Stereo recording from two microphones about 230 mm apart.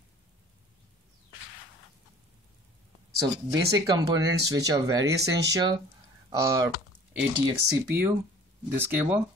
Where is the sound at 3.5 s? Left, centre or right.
Centre.